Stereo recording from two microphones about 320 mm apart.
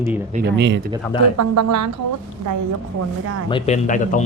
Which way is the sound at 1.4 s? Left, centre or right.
Right.